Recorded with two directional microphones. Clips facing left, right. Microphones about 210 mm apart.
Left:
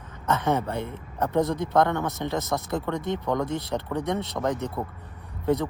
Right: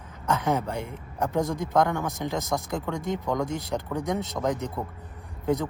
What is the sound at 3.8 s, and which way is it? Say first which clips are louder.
Speech: left 1 dB; centre (ahead or behind).